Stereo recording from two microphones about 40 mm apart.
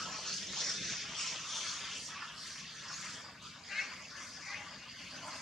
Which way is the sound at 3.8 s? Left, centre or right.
Centre.